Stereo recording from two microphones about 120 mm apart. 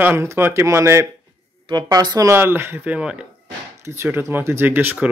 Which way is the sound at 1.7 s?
35° right (ahead or behind).